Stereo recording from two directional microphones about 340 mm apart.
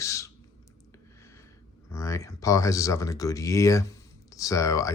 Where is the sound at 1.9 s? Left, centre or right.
Centre.